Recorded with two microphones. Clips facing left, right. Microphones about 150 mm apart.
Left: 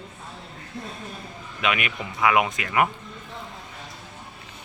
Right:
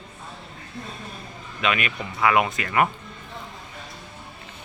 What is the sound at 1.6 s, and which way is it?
Speech, 15° left (ahead or behind).